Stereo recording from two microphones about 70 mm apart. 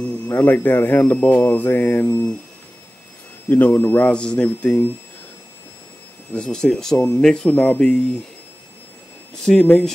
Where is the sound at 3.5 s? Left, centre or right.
Left.